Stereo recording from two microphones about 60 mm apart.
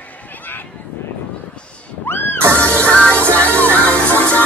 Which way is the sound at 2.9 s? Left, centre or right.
Centre.